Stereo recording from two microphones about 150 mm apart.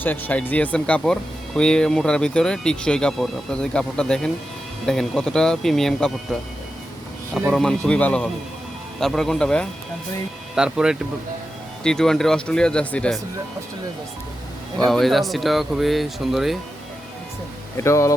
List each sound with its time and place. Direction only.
0.0 s speech: 10° left (ahead or behind)
7.5 s a man's voice: 5° left (ahead or behind)
10.5 s speech: 5° right (ahead or behind)
14.8 s speech: centre (ahead or behind)
17.8 s speech: 20° left (ahead or behind)